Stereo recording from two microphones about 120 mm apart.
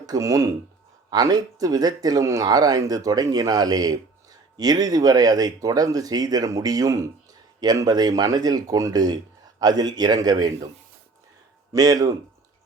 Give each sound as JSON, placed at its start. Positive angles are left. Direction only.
{"t": 0.0, "sound": "speech", "side_deg": -30}
{"t": 11.7, "sound": "speech", "side_deg": -30}